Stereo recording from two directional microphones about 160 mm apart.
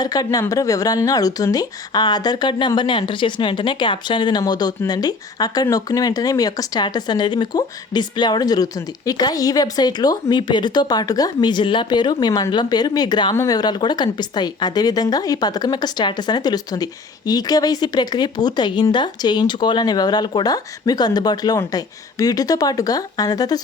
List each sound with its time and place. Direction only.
0.0 s speech: 25° left (ahead or behind)